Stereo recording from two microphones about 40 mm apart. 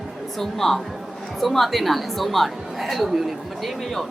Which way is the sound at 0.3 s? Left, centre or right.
Centre.